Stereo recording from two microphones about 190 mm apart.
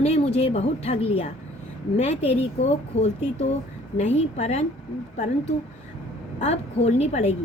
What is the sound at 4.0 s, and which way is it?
Speech, 35° left (ahead or behind).